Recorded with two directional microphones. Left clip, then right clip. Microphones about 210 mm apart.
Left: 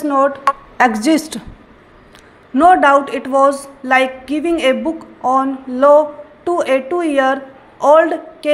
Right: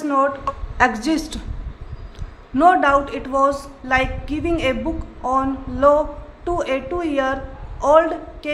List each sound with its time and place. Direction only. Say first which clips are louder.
0.0 s a woman's voice: left 5 dB; 20° left (ahead or behind)
2.5 s a woman's voice: left 5 dB; 25° left (ahead or behind)